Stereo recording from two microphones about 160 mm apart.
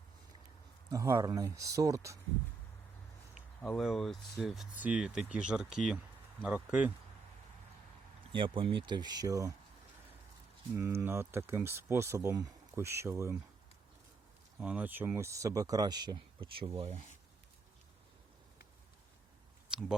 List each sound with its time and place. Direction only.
0.9 s speech: 20° right (ahead or behind)
3.6 s speech: centre (ahead or behind)
8.3 s speech: 30° right (ahead or behind)
10.8 s speech: 15° right (ahead or behind)
14.6 s speech: 10° right (ahead or behind); by 17.0 s 40° right (ahead or behind)